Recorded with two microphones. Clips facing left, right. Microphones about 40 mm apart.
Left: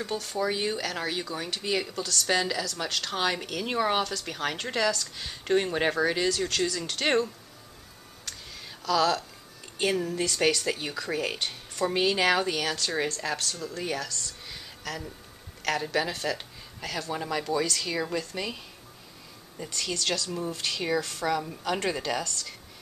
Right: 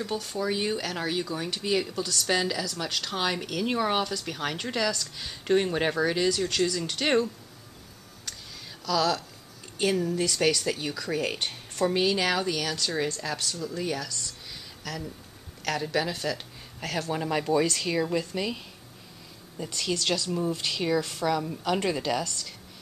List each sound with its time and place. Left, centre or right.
0.0 s speech: centre
8.8 s speech: centre
17.3 s speech: right
18.3 s speech: centre
19.6 s speech: centre
21.3 s speech: centre